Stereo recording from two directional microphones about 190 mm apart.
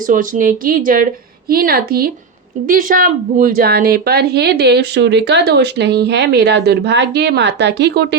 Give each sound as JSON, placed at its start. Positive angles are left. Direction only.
{"t": 0.1, "sound": "a woman's voice", "side_deg": -45}